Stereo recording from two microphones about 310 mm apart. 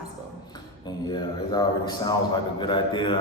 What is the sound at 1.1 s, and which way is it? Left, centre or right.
A man's voice, centre.